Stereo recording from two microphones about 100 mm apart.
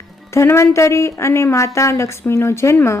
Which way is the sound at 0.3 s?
25° left (ahead or behind).